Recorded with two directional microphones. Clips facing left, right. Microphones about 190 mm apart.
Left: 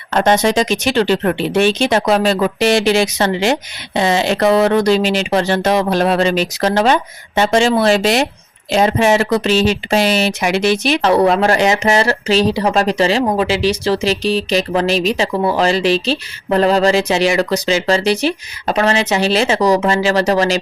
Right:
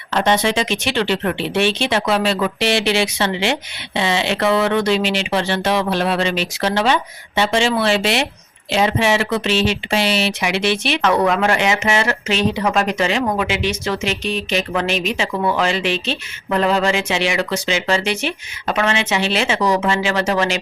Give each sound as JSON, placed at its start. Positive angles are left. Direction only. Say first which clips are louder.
{"t": 0.1, "sound": "speech", "louder": "left 4 dB", "side_deg": 45}